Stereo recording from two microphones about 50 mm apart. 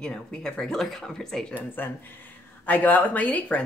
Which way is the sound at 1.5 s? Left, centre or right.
Left.